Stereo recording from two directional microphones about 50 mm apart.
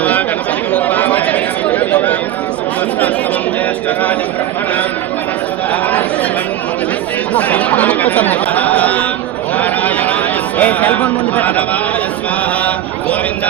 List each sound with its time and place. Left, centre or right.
0.0 s chatter: left
7.3 s chatter: left
9.6 s a sound: left
10.6 s speech: left